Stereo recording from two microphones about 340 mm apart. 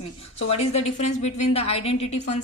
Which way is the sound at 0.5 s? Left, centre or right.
Centre.